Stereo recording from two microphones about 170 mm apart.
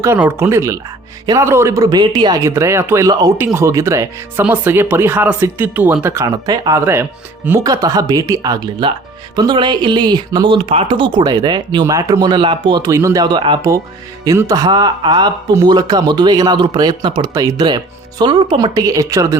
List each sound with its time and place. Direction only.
0.0 s speech: 15° right (ahead or behind)